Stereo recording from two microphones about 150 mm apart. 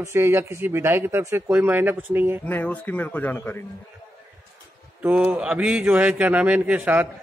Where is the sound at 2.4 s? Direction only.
10° left (ahead or behind).